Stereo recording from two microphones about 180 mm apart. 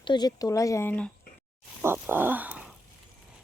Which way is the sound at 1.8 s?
10° right (ahead or behind).